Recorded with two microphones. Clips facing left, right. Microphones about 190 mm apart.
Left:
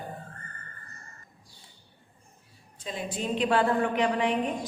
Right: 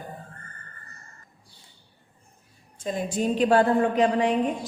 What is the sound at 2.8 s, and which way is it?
A woman's voice, 45° right (ahead or behind).